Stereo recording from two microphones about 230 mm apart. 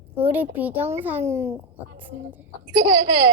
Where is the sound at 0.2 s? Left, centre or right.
Centre.